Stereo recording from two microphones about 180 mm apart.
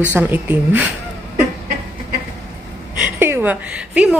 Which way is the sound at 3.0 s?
10° right (ahead or behind).